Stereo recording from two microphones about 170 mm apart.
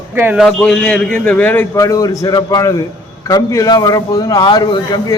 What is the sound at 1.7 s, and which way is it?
A man's voice, 20° left (ahead or behind).